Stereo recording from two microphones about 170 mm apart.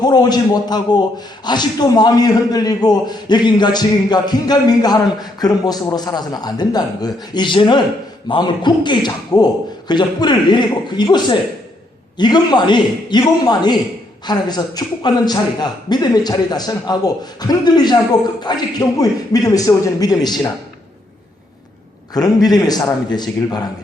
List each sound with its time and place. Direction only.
0.0 s a man's voice: 25° left (ahead or behind)
22.1 s a man's voice: 20° left (ahead or behind)